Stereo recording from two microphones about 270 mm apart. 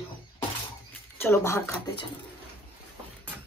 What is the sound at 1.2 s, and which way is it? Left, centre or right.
Speech, centre.